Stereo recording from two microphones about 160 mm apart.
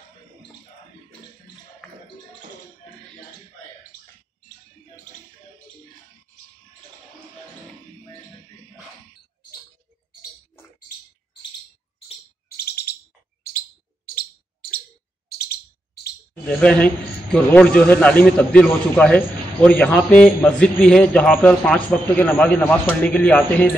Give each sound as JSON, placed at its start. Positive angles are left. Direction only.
{"t": 12.4, "sound": "bird", "side_deg": 75}
{"t": 14.0, "sound": "bird", "side_deg": 65}
{"t": 15.3, "sound": "bird", "side_deg": 80}
{"t": 16.4, "sound": "a man's voice", "side_deg": 5}